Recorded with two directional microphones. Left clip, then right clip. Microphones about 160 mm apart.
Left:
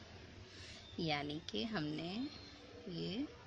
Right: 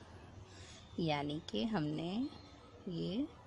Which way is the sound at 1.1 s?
45° right (ahead or behind).